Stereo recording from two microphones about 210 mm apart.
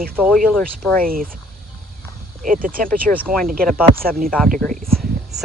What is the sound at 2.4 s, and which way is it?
Speech, 40° right (ahead or behind).